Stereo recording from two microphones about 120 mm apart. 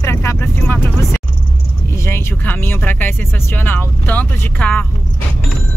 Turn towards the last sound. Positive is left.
turn(degrees=10)  # may be behind; listen again after turning